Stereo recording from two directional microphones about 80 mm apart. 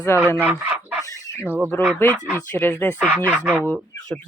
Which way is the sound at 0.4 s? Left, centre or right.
Right.